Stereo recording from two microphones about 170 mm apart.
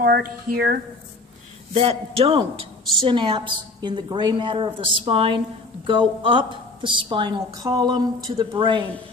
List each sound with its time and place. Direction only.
0.0 s speech: 65° right (ahead or behind)
1.7 s a woman's voice: 35° right (ahead or behind)